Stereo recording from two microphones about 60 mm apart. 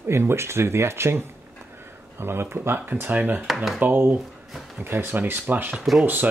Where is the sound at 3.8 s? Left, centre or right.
Right.